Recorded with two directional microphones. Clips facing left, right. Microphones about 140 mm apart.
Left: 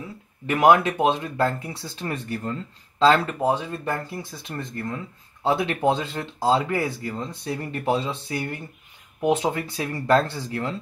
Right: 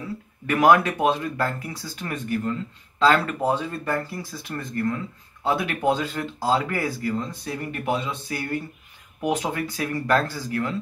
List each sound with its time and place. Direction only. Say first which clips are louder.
0.0 s speech: right 2 dB; 20° left (ahead or behind)